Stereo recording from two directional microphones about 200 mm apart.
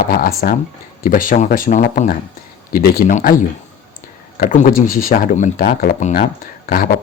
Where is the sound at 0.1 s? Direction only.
45° left (ahead or behind).